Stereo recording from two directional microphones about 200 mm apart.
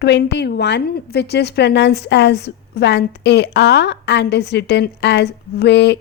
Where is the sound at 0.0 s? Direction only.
55° left (ahead or behind).